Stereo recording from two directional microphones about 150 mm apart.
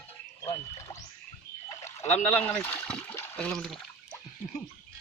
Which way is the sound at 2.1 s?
15° left (ahead or behind).